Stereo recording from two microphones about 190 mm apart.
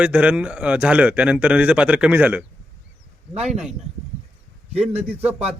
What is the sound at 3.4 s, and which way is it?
Speech, 5° right (ahead or behind).